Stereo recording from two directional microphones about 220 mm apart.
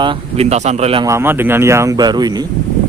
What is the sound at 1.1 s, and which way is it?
Speech, 10° right (ahead or behind).